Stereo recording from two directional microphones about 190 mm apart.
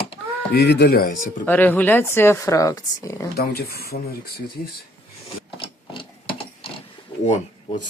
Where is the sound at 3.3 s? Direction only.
55° left (ahead or behind).